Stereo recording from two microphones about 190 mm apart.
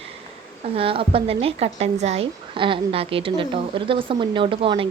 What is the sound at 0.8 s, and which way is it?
A woman's voice, 30° right (ahead or behind).